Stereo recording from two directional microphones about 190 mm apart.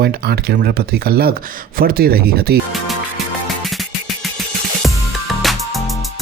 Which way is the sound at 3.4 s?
Centre (ahead or behind).